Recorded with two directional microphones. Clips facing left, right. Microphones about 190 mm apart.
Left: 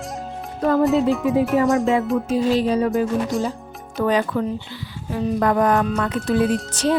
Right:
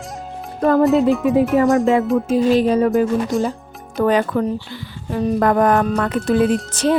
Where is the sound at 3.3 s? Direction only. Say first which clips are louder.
Right 5 dB; centre (ahead or behind).